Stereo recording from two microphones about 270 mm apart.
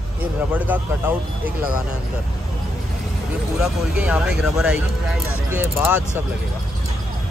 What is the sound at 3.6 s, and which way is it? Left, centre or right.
Speech, centre.